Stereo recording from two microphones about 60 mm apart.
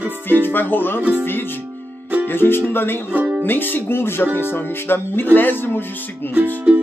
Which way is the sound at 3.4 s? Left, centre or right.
Left.